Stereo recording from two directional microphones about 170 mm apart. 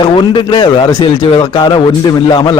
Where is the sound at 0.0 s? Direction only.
25° left (ahead or behind).